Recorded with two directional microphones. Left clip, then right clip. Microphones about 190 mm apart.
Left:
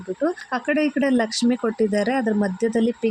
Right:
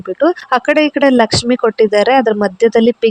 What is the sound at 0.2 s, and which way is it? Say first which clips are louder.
Speech: right 13 dB; 40° right (ahead or behind).